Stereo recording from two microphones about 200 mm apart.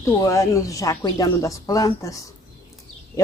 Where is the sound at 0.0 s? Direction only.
15° left (ahead or behind).